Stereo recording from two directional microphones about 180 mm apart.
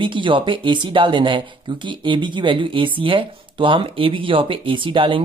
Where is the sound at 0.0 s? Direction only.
25° right (ahead or behind).